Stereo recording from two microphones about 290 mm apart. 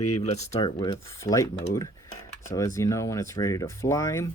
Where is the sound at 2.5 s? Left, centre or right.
Centre.